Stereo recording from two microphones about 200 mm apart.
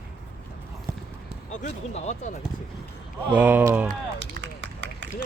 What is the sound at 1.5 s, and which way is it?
Speech, 35° left (ahead or behind).